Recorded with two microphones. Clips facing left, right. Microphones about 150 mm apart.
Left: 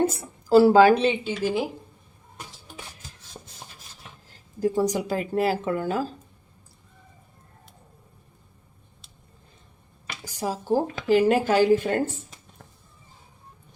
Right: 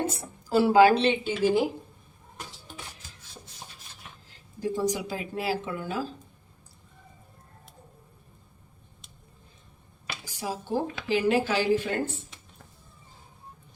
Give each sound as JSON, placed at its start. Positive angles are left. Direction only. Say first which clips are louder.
{"t": 0.4, "sound": "speech", "louder": "left 7 dB", "side_deg": 35}
{"t": 0.9, "sound": "speech", "louder": "left 2 dB", "side_deg": 10}
{"t": 4.6, "sound": "speech", "louder": "left 5 dB", "side_deg": 50}
{"t": 10.4, "sound": "speech", "louder": "left 5 dB", "side_deg": 40}